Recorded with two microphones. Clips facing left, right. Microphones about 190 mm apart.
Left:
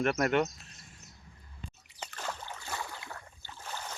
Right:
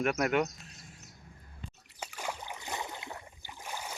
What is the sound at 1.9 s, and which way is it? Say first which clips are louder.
Boat: right 1 dB; 10° right (ahead or behind).